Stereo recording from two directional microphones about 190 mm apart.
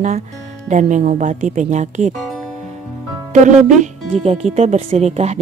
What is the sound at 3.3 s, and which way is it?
Speech, 40° right (ahead or behind).